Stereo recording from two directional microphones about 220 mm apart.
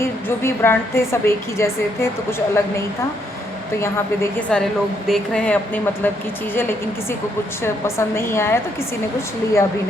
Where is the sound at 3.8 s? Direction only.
10° left (ahead or behind).